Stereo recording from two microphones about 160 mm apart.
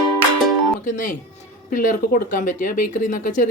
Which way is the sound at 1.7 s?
55° left (ahead or behind).